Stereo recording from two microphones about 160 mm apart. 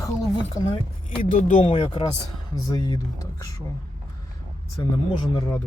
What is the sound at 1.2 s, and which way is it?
Speech, 55° left (ahead or behind).